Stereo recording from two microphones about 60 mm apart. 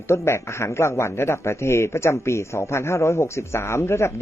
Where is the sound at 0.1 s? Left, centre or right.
Left.